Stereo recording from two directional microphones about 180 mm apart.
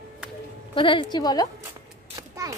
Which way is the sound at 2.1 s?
20° right (ahead or behind).